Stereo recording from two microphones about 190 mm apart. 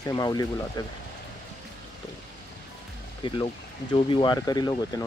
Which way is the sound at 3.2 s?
25° left (ahead or behind).